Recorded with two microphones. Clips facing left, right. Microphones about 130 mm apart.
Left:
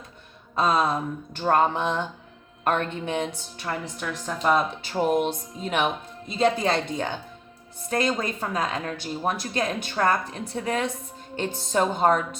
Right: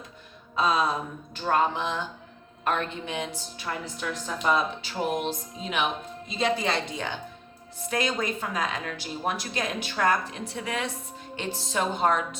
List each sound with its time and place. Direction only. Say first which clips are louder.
0.5 s speech: left 2 dB; 50° left (ahead or behind)